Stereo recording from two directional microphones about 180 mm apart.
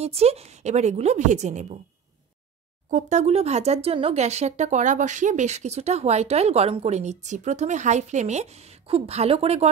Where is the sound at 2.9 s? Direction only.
40° right (ahead or behind).